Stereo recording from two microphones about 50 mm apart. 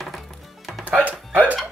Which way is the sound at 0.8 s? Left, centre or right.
Right.